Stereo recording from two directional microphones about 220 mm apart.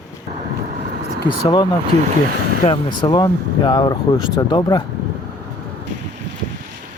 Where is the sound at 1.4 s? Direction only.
20° left (ahead or behind).